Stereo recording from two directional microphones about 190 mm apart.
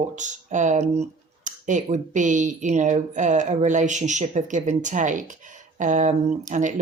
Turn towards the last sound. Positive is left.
turn(degrees=-40)  # may be behind; listen again after turning